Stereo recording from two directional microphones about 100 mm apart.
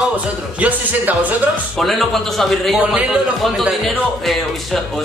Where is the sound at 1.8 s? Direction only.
Centre (ahead or behind).